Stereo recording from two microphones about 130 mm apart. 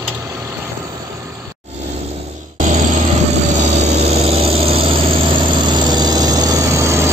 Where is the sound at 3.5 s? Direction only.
55° right (ahead or behind); by 7.1 s 20° right (ahead or behind).